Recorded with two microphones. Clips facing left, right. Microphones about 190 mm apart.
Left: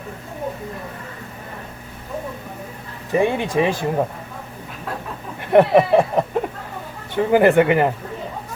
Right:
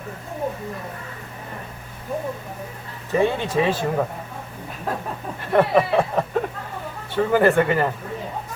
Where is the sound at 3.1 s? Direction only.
15° left (ahead or behind).